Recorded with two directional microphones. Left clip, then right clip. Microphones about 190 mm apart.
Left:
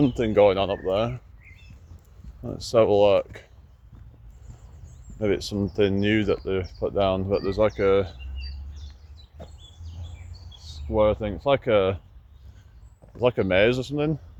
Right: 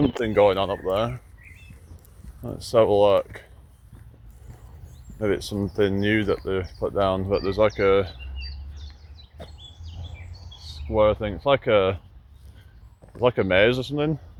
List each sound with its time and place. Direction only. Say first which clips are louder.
0.3 s speech: even; 25° left (ahead or behind)
2.4 s speech: right 1 dB; 15° left (ahead or behind)
5.2 s speech: even; 15° left (ahead or behind); by 8.2 s centre (ahead or behind)
10.6 s speech: right 2 dB; 5° right (ahead or behind)
13.1 s speech: right 1 dB; centre (ahead or behind)